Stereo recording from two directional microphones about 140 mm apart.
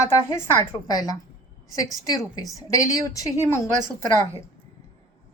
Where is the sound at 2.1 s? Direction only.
25° left (ahead or behind).